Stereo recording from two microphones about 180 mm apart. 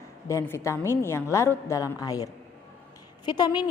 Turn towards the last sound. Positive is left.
turn(degrees=25)  # may be behind; listen again after turning